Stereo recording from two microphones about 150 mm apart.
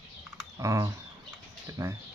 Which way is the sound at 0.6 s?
20° right (ahead or behind).